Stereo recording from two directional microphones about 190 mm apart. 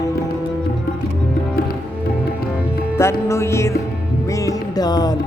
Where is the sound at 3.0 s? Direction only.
15° left (ahead or behind).